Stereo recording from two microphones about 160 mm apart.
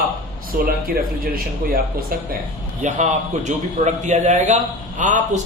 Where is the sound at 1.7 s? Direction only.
65° right (ahead or behind).